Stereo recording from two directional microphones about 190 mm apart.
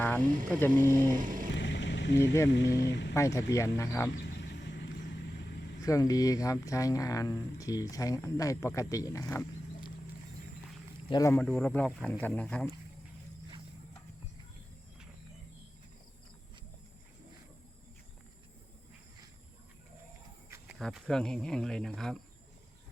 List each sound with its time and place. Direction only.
0.6 s speech: 10° left (ahead or behind)
1.2 s music: 45° right (ahead or behind)
1.5 s vehicle: 70° left (ahead or behind)
2.8 s speech: 65° left (ahead or behind)
3.2 s speech: 15° left (ahead or behind)
4.2 s a sound: 65° left (ahead or behind)
5.8 s speech: 20° left (ahead or behind)
11.1 s speech: 15° left (ahead or behind)
20.5 s cricket: 10° right (ahead or behind)
20.8 s speech: 5° left (ahead or behind)